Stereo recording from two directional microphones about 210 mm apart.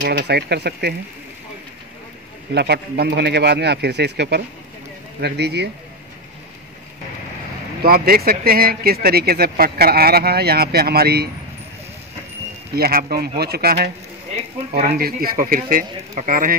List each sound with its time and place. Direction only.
0.0 s speech: 50° right (ahead or behind)
2.5 s speech: 50° right (ahead or behind)
7.8 s speech: 45° right (ahead or behind)
12.7 s speech: 45° right (ahead or behind)
15.0 s a man's voice: 45° right (ahead or behind)